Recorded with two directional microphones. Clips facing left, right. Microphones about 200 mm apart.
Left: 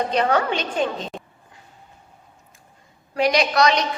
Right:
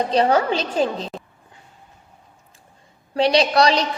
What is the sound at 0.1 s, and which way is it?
A woman's voice, 30° right (ahead or behind).